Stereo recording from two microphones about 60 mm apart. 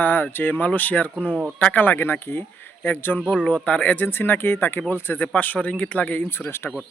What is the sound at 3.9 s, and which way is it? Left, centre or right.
Speech, left.